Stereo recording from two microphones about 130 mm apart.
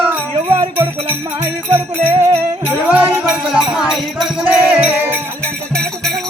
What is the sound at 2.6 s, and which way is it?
Music, 15° right (ahead or behind).